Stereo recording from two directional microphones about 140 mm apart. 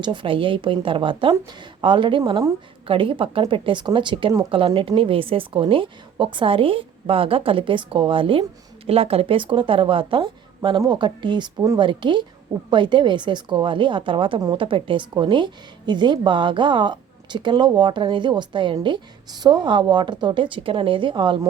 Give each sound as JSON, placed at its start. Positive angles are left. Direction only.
{"t": 0.0, "sound": "a woman's voice", "side_deg": -35}